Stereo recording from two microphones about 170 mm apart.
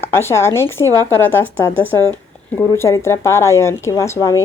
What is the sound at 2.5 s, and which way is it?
A woman's voice, 15° left (ahead or behind).